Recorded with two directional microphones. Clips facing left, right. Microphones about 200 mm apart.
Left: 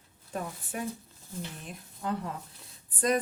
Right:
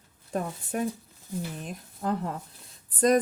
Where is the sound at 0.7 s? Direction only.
50° right (ahead or behind).